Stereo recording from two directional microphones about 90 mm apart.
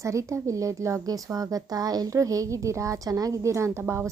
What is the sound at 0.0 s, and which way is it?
A woman's voice, 35° right (ahead or behind).